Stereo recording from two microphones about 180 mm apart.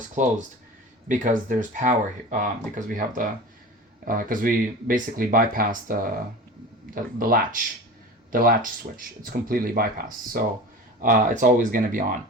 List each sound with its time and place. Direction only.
0.2 s speech: 45° right (ahead or behind)